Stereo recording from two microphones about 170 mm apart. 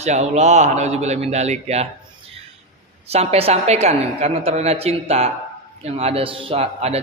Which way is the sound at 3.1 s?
35° right (ahead or behind).